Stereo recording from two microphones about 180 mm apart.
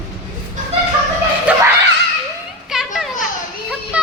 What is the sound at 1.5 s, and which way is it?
Screaming, 5° right (ahead or behind).